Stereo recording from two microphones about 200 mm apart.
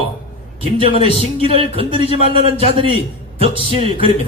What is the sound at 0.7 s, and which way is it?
Speech, 25° right (ahead or behind).